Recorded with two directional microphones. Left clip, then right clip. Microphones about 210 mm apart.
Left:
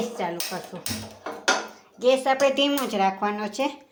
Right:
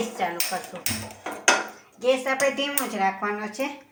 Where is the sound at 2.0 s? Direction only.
45° left (ahead or behind).